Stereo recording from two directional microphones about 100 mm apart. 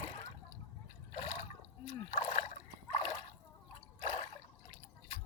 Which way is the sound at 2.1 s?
90° left.